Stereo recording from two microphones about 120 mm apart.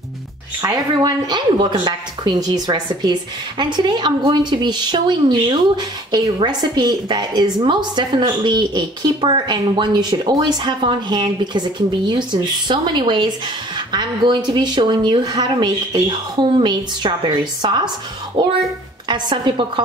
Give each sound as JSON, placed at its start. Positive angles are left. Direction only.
{"t": 0.6, "sound": "a woman's voice", "side_deg": -30}